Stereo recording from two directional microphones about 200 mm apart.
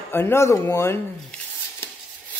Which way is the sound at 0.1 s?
10° left (ahead or behind).